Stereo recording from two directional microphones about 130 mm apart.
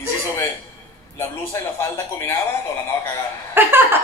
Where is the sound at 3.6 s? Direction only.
15° right (ahead or behind).